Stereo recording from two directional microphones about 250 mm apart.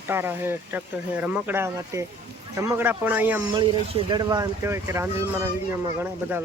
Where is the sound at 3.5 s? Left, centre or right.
Centre.